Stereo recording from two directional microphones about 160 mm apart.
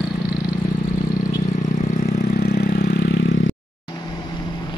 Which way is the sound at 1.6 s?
70° left (ahead or behind).